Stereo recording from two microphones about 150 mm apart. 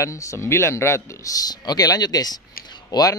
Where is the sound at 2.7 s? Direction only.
25° left (ahead or behind).